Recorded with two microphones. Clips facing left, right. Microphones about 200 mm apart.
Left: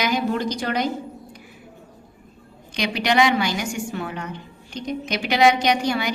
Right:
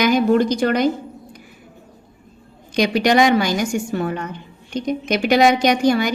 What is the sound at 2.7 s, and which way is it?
A woman's voice, 45° right (ahead or behind).